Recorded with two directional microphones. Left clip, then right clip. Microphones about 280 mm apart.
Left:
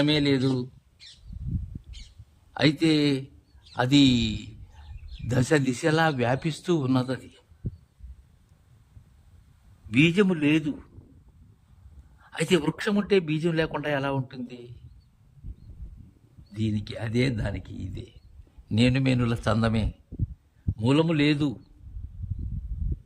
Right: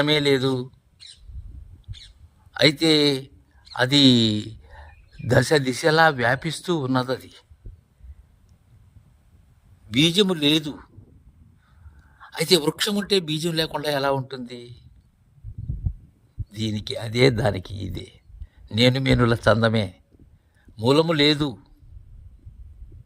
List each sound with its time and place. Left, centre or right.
0.0 s speech: centre
2.5 s speech: centre
9.9 s a man's voice: centre
12.2 s speech: centre
12.9 s speech: centre
13.7 s speech: right
16.5 s speech: centre
20.7 s speech: centre